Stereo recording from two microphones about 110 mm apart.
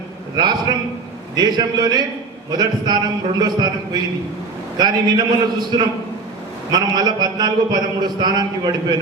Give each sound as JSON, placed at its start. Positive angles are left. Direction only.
{"t": 0.3, "sound": "a man's voice", "side_deg": -40}
{"t": 4.8, "sound": "a man's voice", "side_deg": -40}